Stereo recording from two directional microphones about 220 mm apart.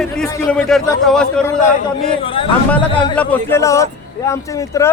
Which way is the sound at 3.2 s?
10° left (ahead or behind).